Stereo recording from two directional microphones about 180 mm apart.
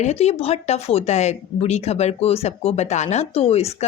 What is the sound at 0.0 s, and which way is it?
Speech, 35° left (ahead or behind).